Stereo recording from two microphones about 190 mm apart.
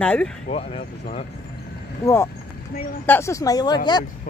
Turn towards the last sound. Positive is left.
turn(degrees=20)  # may be behind; listen again after turning